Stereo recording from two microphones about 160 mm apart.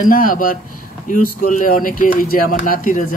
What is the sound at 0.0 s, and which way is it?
Speech, 60° left (ahead or behind).